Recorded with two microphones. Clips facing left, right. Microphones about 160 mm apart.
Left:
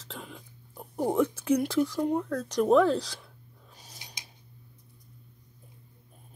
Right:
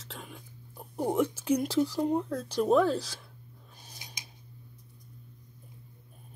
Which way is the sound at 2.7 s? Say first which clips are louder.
Left 3 dB; 5° right (ahead or behind).